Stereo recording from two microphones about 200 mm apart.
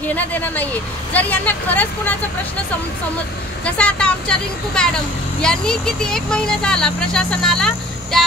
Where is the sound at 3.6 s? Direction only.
5° left (ahead or behind).